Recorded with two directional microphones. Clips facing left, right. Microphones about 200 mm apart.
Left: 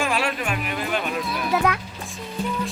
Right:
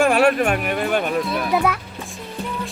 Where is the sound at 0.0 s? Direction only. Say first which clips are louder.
Right 9 dB; 50° right (ahead or behind).